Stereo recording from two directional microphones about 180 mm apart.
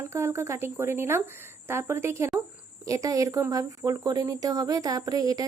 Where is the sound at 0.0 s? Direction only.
15° right (ahead or behind).